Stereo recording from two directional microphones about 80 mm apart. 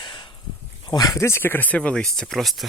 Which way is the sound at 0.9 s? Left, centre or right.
Left.